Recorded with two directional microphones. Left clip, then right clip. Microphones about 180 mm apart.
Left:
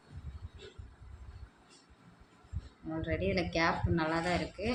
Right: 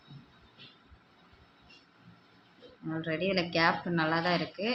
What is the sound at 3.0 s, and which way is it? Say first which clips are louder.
Speech: right 3 dB; 30° right (ahead or behind).